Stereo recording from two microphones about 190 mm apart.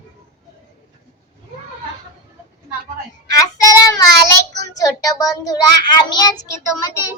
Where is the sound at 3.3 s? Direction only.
20° left (ahead or behind).